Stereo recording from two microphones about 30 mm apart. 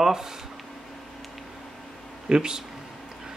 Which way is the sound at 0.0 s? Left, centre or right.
Centre.